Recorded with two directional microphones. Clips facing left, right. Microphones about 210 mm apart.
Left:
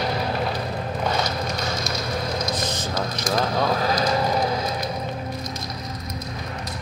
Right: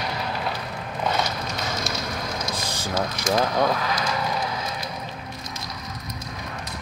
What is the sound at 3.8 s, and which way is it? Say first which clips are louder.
Speech: left 5 dB; 35° left (ahead or behind).